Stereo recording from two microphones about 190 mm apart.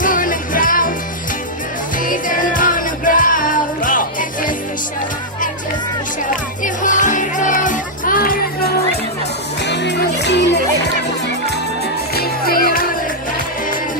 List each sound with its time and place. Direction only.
0.0 s music: 45° left (ahead or behind)
2.0 s music: 45° left (ahead or behind)
6.8 s music: 40° left (ahead or behind)
9.6 s music: 65° left (ahead or behind)
12.1 s music: 50° left (ahead or behind)